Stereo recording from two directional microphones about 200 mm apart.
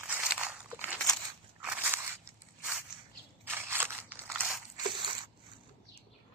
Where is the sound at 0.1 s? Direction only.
10° right (ahead or behind).